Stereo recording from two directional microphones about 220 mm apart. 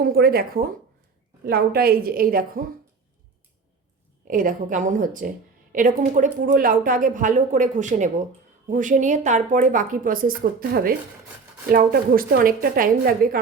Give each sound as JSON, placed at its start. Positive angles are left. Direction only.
{"t": 0.0, "sound": "a woman's voice", "side_deg": -45}
{"t": 4.3, "sound": "a woman's voice", "side_deg": -40}